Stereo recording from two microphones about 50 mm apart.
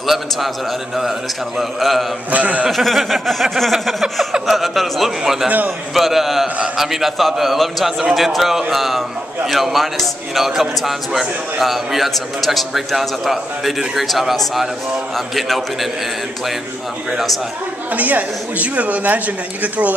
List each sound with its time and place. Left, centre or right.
0.0 s a man's voice: centre
1.6 s a man's voice: centre
2.3 s speech: right
2.7 s a man's voice: centre
17.1 s a man's voice: centre
17.9 s speech: right